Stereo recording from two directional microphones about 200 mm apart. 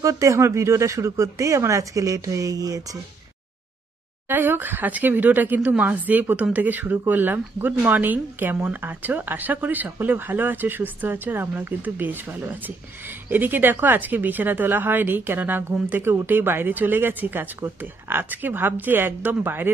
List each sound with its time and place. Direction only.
0.0 s a woman's voice: 15° right (ahead or behind)
4.3 s a woman's voice: 10° right (ahead or behind)